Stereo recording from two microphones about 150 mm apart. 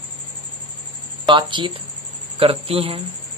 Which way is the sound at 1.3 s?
30° right (ahead or behind).